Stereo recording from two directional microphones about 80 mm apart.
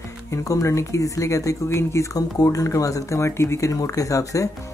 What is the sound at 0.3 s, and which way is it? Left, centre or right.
Speech, left.